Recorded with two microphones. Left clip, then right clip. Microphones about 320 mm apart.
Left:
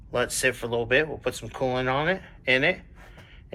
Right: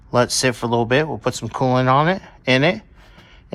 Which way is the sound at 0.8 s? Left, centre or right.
Right.